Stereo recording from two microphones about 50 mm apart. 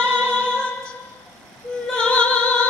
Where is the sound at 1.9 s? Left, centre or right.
Left.